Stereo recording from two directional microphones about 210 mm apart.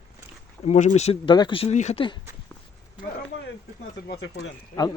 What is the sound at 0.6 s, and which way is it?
Speech, 35° left (ahead or behind).